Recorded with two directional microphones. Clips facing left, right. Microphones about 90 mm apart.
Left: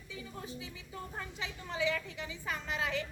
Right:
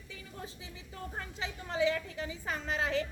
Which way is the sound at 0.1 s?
35° right (ahead or behind).